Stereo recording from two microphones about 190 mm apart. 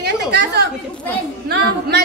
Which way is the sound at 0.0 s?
60° right (ahead or behind).